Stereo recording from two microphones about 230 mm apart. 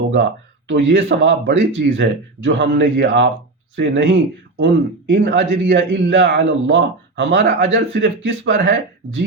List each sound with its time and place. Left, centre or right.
0.7 s speech: right